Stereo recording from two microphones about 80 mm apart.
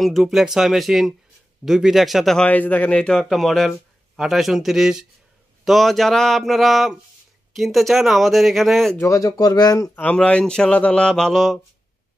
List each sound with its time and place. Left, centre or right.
0.0 s speech: centre
2.3 s speech: centre
9.0 s speech: left
10.1 s speech: centre